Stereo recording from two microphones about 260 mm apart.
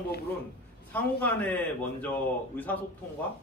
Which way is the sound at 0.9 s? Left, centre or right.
Centre.